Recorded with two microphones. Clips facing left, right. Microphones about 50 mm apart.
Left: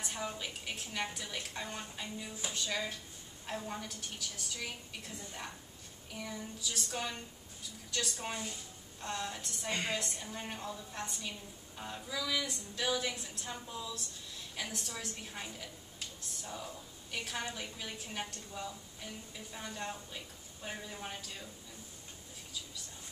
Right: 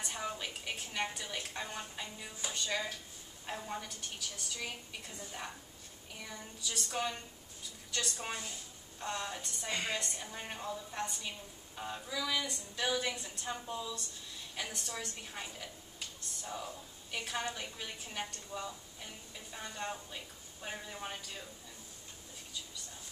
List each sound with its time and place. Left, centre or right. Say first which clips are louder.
0.0 s a woman's voice: even; centre
6.1 s a woman's voice: left 4 dB; centre